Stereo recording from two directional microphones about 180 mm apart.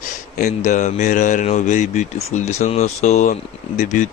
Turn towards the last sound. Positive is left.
turn(degrees=45)  # may be behind; listen again after turning